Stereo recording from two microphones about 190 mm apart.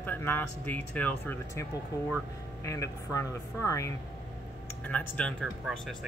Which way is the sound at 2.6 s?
15° left (ahead or behind).